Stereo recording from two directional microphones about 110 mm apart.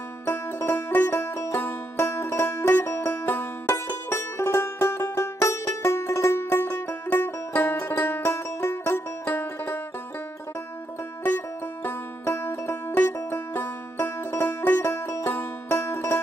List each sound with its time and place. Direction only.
0.2 s music: 20° left (ahead or behind)
11.2 s music: 20° left (ahead or behind)